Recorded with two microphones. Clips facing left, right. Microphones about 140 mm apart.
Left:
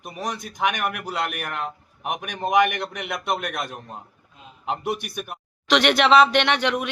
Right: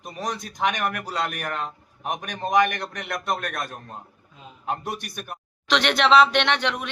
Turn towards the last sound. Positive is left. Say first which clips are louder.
# left 2 dB
turn(degrees=5)  # may be behind; listen again after turning